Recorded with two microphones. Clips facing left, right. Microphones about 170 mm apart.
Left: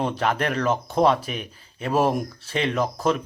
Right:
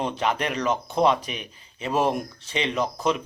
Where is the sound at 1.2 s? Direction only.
45° left (ahead or behind).